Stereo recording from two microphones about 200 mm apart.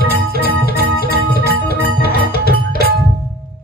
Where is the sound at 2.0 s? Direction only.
50° left (ahead or behind).